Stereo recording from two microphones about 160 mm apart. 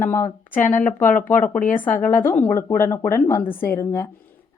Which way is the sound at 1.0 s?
55° left (ahead or behind).